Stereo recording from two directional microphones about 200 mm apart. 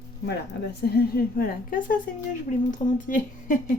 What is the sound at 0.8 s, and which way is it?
A woman's voice, 50° left (ahead or behind).